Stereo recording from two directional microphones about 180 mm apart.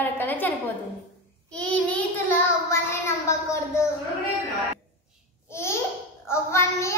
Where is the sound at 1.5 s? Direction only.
10° left (ahead or behind).